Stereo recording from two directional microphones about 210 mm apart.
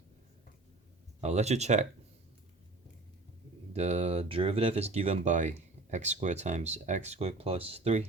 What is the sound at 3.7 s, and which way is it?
Speech, 30° right (ahead or behind).